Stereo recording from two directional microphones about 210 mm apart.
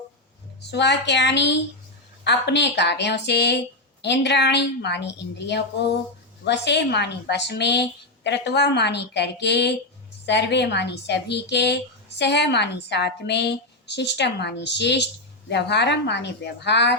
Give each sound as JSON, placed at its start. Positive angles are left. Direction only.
{"t": 0.6, "sound": "a woman's voice", "side_deg": 55}